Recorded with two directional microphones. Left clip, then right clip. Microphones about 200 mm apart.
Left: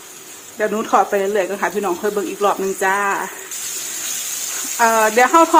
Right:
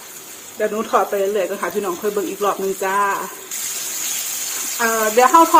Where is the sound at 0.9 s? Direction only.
40° left (ahead or behind).